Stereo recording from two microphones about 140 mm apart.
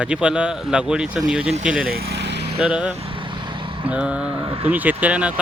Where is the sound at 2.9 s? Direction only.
40° right (ahead or behind).